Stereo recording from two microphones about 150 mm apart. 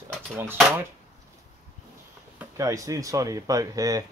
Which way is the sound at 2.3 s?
20° right (ahead or behind).